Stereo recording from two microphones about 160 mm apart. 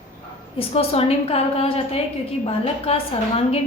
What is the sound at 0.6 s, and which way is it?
A woman's voice, 40° left (ahead or behind).